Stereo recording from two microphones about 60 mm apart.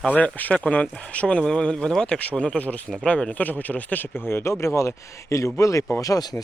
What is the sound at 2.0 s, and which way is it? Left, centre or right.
Speech, left.